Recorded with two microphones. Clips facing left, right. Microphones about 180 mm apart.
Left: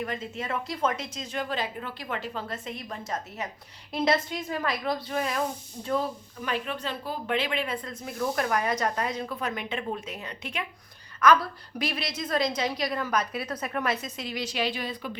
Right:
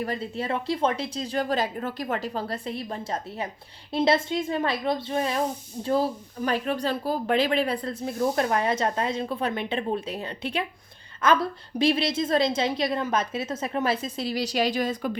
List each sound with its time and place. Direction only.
0.0 s a woman's voice: 35° right (ahead or behind)